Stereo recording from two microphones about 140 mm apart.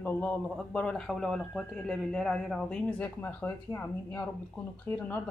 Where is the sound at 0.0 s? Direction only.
10° left (ahead or behind).